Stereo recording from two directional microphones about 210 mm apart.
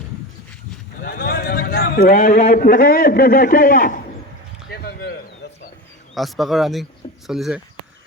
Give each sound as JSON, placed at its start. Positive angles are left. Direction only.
{"t": 1.0, "sound": "a man's voice", "side_deg": 45}
{"t": 4.7, "sound": "a sound", "side_deg": 50}
{"t": 6.1, "sound": "speech", "side_deg": 0}